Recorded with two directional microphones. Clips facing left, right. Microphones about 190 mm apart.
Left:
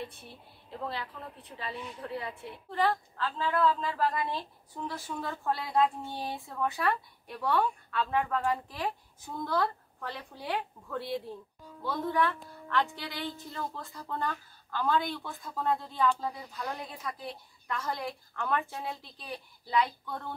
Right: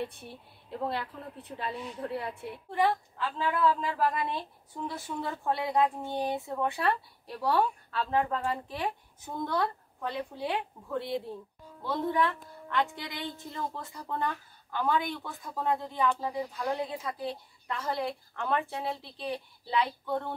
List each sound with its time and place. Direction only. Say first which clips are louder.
1.6 s speech: right 3 dB; 50° right (ahead or behind)
2.7 s a woman's voice: right 1 dB; 10° right (ahead or behind)